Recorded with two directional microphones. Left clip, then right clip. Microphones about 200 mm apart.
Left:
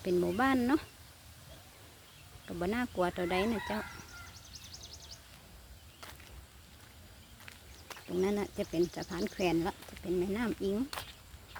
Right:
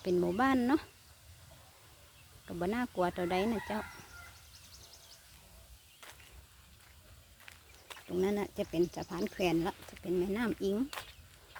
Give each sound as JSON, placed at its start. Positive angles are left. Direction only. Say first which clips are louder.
{"t": 0.0, "sound": "speech", "louder": "even", "side_deg": -15}
{"t": 2.5, "sound": "speech", "louder": "even", "side_deg": -15}
{"t": 8.1, "sound": "speech", "louder": "even", "side_deg": -15}